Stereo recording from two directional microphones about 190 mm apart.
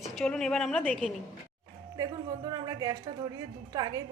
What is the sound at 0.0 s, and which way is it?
A woman's voice, centre (ahead or behind).